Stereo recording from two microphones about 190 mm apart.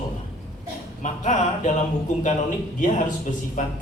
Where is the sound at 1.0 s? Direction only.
40° left (ahead or behind).